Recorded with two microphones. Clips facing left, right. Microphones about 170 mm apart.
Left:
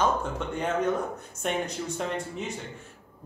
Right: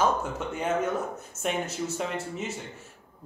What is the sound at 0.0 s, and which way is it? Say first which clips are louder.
A man's voice: even; 5° right (ahead or behind).